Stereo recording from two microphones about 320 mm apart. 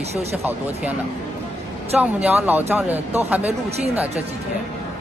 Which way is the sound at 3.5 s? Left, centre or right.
Centre.